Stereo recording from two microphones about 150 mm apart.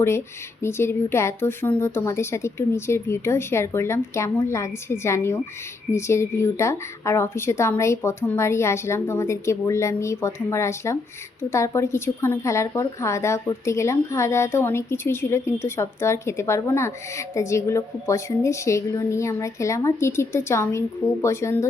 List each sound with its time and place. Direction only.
0.6 s a woman's voice: 15° left (ahead or behind)